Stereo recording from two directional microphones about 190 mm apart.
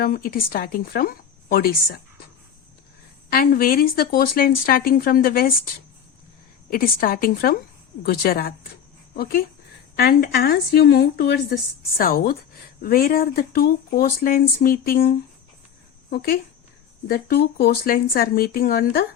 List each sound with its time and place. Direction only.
0.0 s speech: 50° left (ahead or behind)
3.2 s speech: 50° left (ahead or behind)